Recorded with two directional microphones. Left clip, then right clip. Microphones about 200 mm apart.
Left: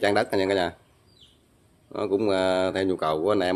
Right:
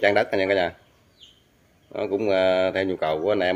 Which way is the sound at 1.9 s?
15° left (ahead or behind).